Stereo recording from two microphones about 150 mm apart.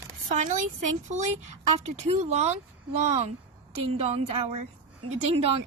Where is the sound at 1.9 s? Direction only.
45° right (ahead or behind).